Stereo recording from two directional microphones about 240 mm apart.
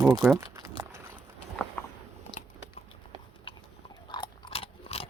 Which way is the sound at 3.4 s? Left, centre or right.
Centre.